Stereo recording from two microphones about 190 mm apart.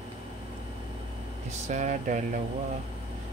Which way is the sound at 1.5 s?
40° right (ahead or behind).